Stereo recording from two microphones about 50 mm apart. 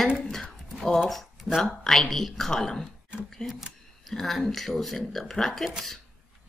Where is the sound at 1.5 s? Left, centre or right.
Centre.